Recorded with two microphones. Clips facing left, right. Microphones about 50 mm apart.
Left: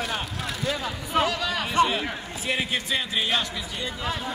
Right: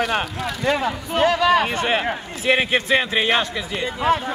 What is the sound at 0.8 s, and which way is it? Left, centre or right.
A man's voice, right.